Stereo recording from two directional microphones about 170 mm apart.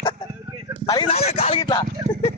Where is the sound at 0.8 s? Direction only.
30° left (ahead or behind).